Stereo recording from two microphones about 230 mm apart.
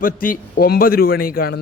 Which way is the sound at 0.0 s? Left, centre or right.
Left.